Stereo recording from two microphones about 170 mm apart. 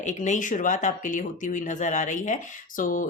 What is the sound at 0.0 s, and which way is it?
Speech, 45° left (ahead or behind).